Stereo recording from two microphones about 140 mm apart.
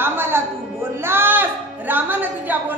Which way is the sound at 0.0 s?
15° right (ahead or behind).